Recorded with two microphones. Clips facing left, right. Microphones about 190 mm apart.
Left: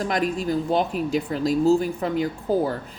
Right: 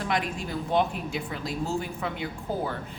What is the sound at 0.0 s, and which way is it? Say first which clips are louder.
Speech: left 6 dB; 40° left (ahead or behind).